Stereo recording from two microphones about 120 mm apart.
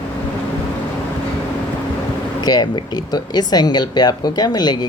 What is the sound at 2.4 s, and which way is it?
Speech, 35° left (ahead or behind).